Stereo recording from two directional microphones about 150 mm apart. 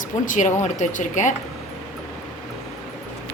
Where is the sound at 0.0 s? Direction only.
55° left (ahead or behind).